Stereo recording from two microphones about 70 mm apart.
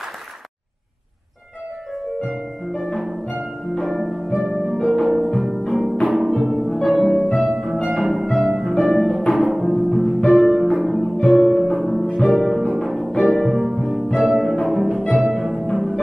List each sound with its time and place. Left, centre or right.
2.2 s music: centre
3.7 s harp: centre
5.0 s music: centre
8.8 s harp: centre
9.3 s music: centre
15.6 s music: centre